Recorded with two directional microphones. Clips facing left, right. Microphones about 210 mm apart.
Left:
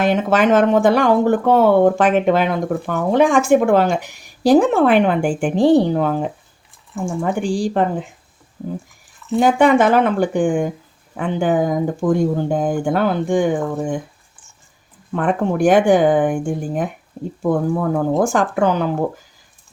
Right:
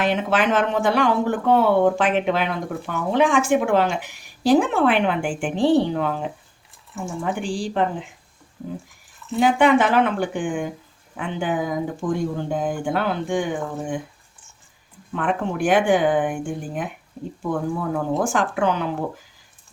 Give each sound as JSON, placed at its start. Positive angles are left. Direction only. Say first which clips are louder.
{"t": 0.0, "sound": "speech", "louder": "left 5 dB", "side_deg": 45}
{"t": 9.4, "sound": "speech", "louder": "left 3 dB", "side_deg": 45}
{"t": 15.1, "sound": "speech", "louder": "left 5 dB", "side_deg": 45}